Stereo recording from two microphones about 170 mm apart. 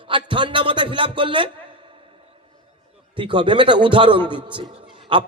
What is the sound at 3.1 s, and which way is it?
A man's voice, 30° right (ahead or behind).